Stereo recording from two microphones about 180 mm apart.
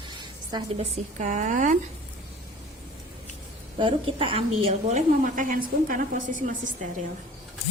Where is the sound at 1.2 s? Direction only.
45° right (ahead or behind).